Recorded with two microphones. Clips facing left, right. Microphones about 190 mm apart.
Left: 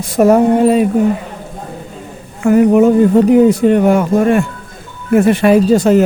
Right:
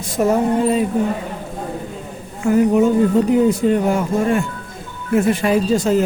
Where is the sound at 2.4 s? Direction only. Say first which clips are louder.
Left 5 dB; 65° left (ahead or behind).